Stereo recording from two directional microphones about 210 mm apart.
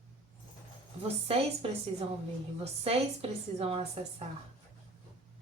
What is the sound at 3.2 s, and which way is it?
Speech, 30° right (ahead or behind).